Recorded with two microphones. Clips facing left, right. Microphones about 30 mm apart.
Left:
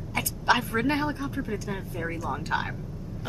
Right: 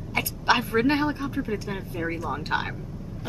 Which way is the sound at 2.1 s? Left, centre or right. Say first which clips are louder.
Right 1 dB; right.